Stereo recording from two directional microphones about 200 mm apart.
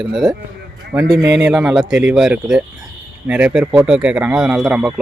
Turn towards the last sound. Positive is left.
turn(degrees=-5)  # may be behind; listen again after turning